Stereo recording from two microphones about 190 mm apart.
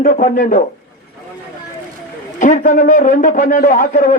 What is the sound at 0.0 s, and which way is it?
Speech, 45° left (ahead or behind).